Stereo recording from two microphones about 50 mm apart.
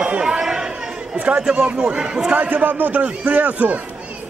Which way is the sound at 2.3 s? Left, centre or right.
Right.